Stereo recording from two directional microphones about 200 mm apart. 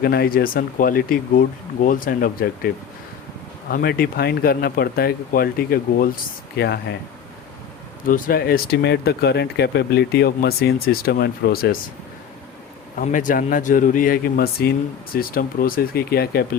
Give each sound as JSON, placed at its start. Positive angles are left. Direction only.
{"t": 0.0, "sound": "speech", "side_deg": 50}
{"t": 3.7, "sound": "speech", "side_deg": 45}
{"t": 8.0, "sound": "speech", "side_deg": 45}
{"t": 13.0, "sound": "speech", "side_deg": 40}